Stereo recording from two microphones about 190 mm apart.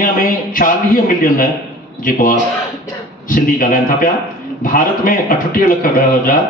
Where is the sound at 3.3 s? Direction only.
45° left (ahead or behind).